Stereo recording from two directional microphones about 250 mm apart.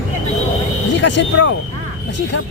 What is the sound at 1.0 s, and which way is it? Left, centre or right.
Speech, left.